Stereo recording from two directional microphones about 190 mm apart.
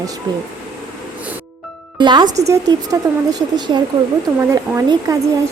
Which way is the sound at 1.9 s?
25° right (ahead or behind).